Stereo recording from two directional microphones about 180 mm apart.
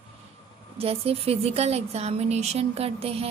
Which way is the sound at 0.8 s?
35° right (ahead or behind).